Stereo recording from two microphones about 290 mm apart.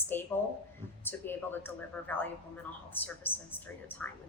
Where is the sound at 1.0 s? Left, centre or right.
Centre.